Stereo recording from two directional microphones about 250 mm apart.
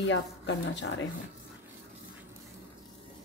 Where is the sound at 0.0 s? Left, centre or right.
Left.